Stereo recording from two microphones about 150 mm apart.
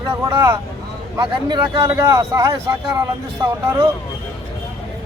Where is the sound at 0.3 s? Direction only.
15° right (ahead or behind).